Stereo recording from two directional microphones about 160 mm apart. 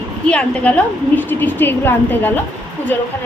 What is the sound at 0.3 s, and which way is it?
A woman's voice, 10° left (ahead or behind).